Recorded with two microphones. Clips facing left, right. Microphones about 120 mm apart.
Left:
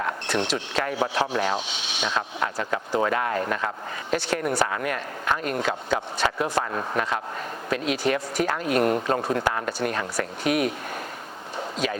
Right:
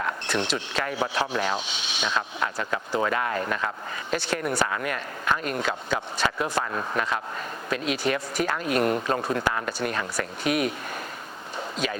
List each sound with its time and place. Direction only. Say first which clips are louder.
0.0 s speech: left 1 dB; 60° left (ahead or behind)